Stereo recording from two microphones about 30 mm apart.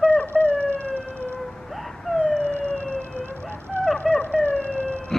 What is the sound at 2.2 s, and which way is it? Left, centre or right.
Howl, left.